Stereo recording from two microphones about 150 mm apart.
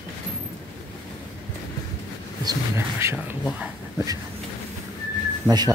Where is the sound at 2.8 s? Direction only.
15° right (ahead or behind).